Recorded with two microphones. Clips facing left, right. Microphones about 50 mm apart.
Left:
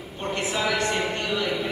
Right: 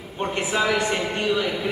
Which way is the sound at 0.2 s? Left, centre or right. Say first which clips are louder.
Right 3 dB; right.